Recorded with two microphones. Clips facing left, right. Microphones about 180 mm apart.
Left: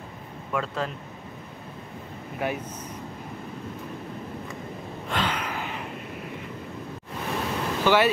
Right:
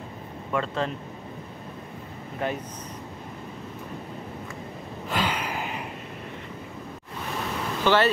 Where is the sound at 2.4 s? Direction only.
10° left (ahead or behind).